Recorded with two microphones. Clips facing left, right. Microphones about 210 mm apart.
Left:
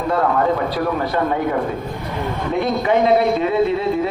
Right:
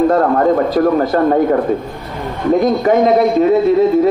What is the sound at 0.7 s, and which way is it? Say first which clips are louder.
Speech: right 8 dB; 45° right (ahead or behind).